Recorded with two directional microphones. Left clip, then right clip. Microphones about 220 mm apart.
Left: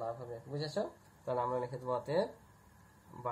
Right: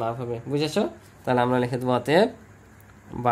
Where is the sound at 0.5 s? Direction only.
45° right (ahead or behind).